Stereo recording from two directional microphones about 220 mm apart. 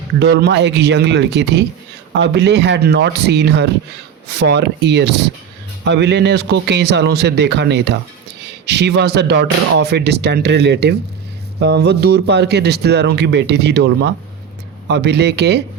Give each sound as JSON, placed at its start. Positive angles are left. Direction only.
{"t": 0.2, "sound": "speech", "side_deg": -50}